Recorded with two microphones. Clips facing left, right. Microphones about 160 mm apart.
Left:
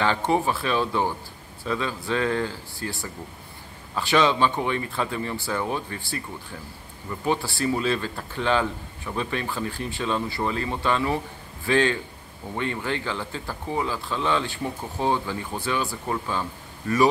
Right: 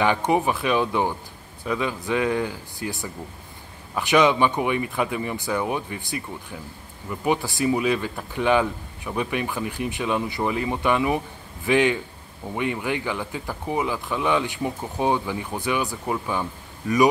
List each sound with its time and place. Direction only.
0.0 s speech: 15° right (ahead or behind)